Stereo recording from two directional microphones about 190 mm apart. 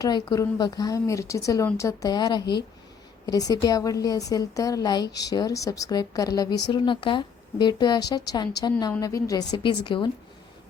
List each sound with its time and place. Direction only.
0.0 s a woman's voice: 20° left (ahead or behind)